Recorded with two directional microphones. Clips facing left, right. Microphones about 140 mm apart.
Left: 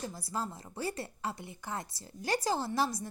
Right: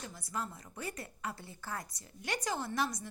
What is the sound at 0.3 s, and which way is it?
Speech, 30° left (ahead or behind).